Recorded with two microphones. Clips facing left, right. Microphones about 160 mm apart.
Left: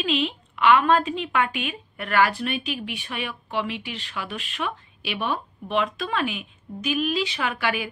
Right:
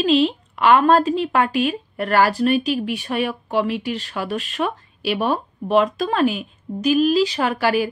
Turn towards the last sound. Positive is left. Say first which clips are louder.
# right 7 dB
turn(degrees=-40)  # may be behind; listen again after turning